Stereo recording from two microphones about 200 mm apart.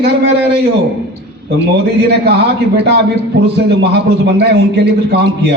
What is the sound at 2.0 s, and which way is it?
Speech, 55° right (ahead or behind).